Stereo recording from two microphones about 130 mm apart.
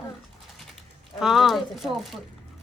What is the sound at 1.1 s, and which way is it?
Speech, 5° right (ahead or behind).